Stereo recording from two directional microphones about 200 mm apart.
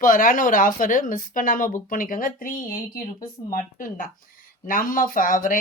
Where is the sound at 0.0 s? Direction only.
45° left (ahead or behind).